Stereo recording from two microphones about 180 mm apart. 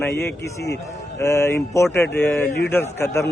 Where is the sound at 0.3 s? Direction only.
65° left (ahead or behind).